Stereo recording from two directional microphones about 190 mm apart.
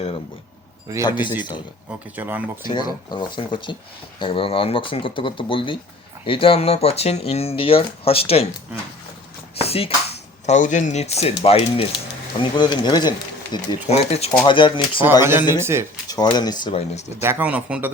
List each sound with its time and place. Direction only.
1.0 s speech: 25° left (ahead or behind)
1.9 s speech: 10° right (ahead or behind)
2.6 s speech: 25° left (ahead or behind)
9.6 s a sound: 30° left (ahead or behind)
10.4 s speech: 40° left (ahead or behind); by 13.7 s 20° left (ahead or behind)
13.9 s speech: 35° left (ahead or behind)
15.2 s speech: 10° right (ahead or behind)
16.0 s speech: 20° left (ahead or behind)
17.2 s speech: 10° right (ahead or behind)